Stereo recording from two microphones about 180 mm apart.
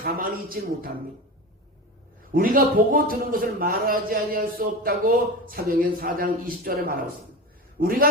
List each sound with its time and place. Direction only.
0.0 s a man's voice: 55° right (ahead or behind)
2.3 s a man's voice: 50° right (ahead or behind)